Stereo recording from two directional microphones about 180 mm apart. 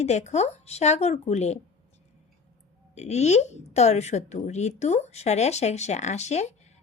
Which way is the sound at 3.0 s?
40° left (ahead or behind).